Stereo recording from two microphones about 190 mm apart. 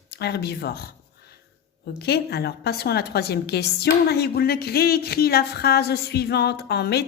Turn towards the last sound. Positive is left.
turn(degrees=60)  # may be behind; listen again after turning